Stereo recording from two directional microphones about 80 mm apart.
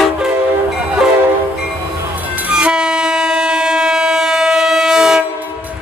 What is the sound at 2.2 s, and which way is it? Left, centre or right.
Train, right.